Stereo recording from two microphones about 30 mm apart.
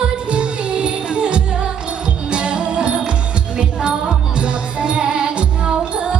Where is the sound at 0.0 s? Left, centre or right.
Right.